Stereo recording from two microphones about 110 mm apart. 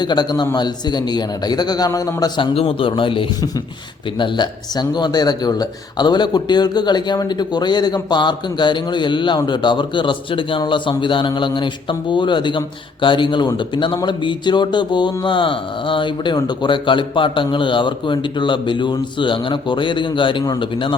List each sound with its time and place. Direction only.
0.0 s a man's voice: 40° left (ahead or behind)
2.6 s a man's voice: 55° left (ahead or behind)